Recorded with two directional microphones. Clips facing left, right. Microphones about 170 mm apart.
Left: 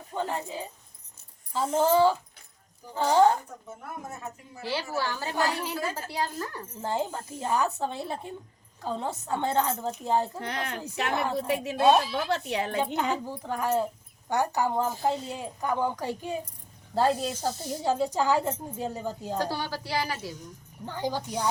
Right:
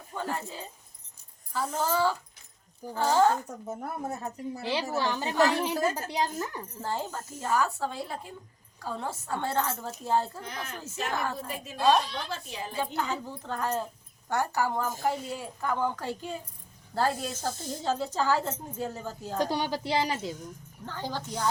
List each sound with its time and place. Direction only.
0.1 s speech: 20° left (ahead or behind)
3.7 s speech: 40° right (ahead or behind)
4.6 s speech: 20° right (ahead or behind)
6.8 s speech: 15° left (ahead or behind)
10.4 s a woman's voice: 70° left (ahead or behind)
11.1 s speech: 15° left (ahead or behind)
11.3 s a woman's voice: 75° left (ahead or behind)
11.9 s a woman's voice: 5° left (ahead or behind)
12.3 s a woman's voice: 70° left (ahead or behind)
12.8 s speech: 20° left (ahead or behind)
19.4 s speech: 20° right (ahead or behind)
20.8 s speech: 15° left (ahead or behind)